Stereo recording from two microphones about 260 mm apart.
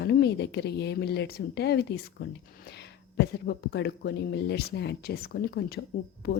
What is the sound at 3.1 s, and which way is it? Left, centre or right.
Speech, left.